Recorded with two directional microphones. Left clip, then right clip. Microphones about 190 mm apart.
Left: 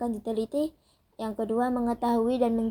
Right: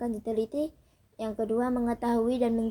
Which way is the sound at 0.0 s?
25° left (ahead or behind).